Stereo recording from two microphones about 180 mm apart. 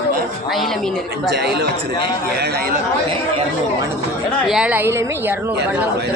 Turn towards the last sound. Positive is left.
turn(degrees=-15)  # may be behind; listen again after turning